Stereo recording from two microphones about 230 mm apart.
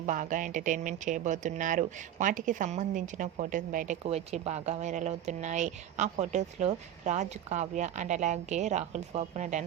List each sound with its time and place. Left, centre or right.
0.0 s speech: right